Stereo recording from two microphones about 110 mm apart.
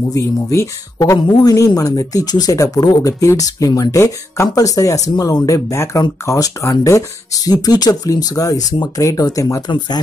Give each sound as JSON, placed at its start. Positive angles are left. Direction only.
{"t": 0.1, "sound": "speech", "side_deg": 30}